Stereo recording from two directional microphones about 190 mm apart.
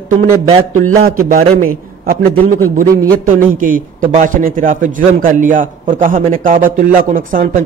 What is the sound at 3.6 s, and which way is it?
A man's voice, 45° right (ahead or behind).